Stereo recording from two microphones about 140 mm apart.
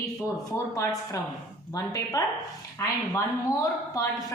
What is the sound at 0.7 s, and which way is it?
A woman's voice, 25° left (ahead or behind).